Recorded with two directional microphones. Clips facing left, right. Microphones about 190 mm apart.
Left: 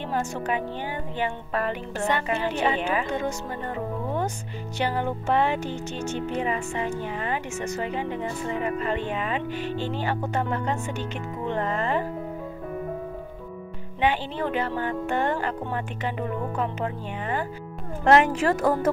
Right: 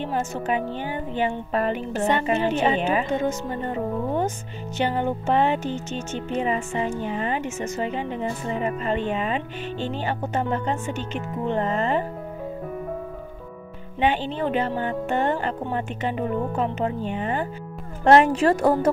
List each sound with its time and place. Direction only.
0.0 s speech: 20° right (ahead or behind)
14.0 s speech: 20° right (ahead or behind)